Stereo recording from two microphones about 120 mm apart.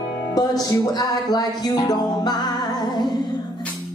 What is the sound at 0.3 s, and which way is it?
Music, 30° left (ahead or behind).